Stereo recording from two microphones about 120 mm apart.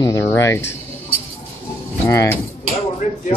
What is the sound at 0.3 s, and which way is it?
Speech, 25° left (ahead or behind).